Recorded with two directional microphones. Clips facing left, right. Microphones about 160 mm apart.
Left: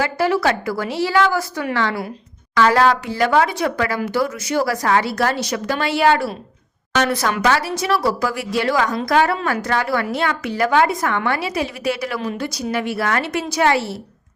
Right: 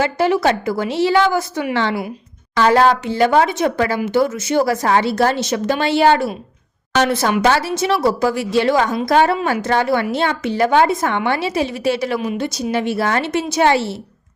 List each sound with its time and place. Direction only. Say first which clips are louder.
0.0 s a woman's voice: right 2 dB; 20° right (ahead or behind)